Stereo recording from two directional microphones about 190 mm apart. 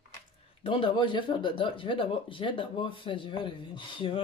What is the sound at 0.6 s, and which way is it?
Speech, 25° left (ahead or behind).